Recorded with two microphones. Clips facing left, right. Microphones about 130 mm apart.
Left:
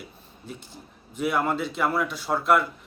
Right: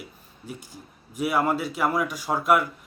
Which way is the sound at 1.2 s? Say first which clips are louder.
Right 1 dB; 10° right (ahead or behind).